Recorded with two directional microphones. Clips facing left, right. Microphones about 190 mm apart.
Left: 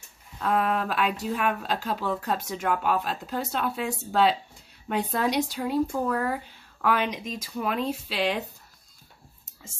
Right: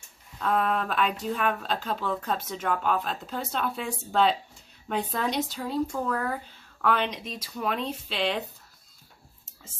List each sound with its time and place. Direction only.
0.4 s speech: 5° left (ahead or behind)